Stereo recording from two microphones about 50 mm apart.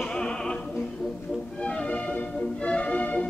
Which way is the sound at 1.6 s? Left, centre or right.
Centre.